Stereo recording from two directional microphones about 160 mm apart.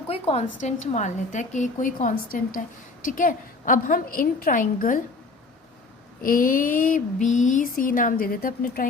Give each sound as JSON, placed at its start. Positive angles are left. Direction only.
{"t": 0.1, "sound": "a woman's voice", "side_deg": 40}
{"t": 6.2, "sound": "a woman's voice", "side_deg": 60}